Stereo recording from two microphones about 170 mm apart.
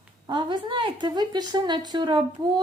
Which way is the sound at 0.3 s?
25° right (ahead or behind).